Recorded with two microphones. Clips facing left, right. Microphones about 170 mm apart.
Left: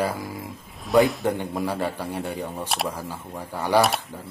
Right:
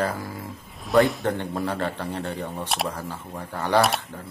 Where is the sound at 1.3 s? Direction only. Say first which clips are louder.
Left 1 dB; 10° left (ahead or behind).